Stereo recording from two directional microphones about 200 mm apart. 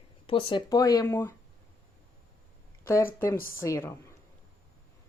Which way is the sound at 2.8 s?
15° left (ahead or behind).